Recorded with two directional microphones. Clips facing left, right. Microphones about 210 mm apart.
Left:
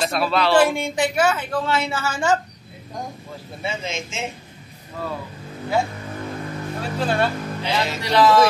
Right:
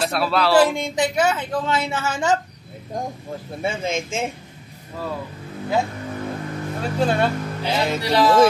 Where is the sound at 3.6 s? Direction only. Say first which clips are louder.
Right 4 dB; 50° right (ahead or behind).